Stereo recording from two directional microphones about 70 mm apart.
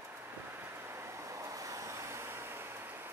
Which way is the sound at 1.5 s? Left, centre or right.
Right.